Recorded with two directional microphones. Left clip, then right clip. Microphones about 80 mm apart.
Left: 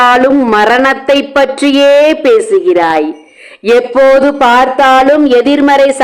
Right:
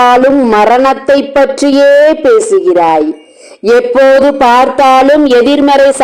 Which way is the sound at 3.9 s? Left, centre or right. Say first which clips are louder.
Even; centre.